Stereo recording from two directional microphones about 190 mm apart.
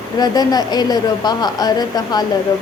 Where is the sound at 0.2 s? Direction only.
20° left (ahead or behind).